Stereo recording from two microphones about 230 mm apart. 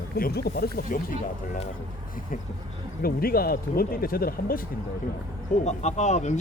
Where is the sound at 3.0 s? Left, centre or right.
Left.